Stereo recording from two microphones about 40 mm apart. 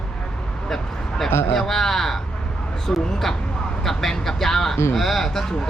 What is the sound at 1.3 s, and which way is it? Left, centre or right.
Speech, left.